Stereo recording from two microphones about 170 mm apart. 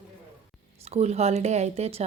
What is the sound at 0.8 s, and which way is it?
Speech, 40° right (ahead or behind).